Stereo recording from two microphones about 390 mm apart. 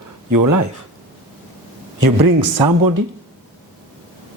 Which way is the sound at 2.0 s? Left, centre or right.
Right.